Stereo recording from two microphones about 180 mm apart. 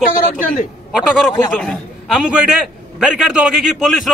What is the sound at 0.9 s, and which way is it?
A man's voice, centre (ahead or behind).